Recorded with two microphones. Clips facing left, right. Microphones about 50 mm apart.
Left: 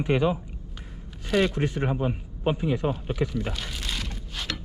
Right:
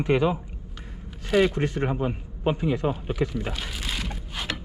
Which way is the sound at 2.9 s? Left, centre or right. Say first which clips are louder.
Right 1 dB; centre.